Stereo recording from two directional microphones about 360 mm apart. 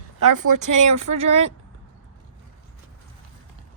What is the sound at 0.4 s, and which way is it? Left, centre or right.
Speech, right.